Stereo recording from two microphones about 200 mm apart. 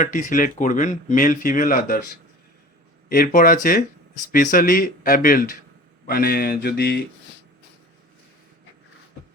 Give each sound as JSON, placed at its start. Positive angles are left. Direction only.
{"t": 0.0, "sound": "speech", "side_deg": 40}
{"t": 3.1, "sound": "speech", "side_deg": 45}